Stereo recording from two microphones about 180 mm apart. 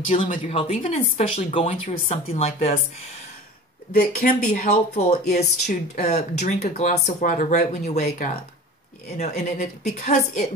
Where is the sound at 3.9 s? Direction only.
55° left (ahead or behind).